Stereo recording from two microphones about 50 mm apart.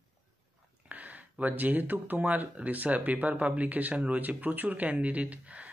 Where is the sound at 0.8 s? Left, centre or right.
Right.